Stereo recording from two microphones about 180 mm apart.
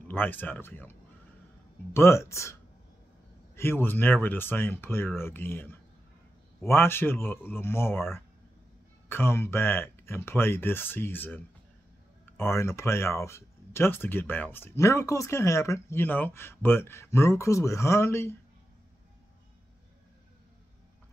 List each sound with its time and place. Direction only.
0.1 s speech: 10° left (ahead or behind)
2.0 s speech: 15° left (ahead or behind)
3.5 s speech: 10° left (ahead or behind)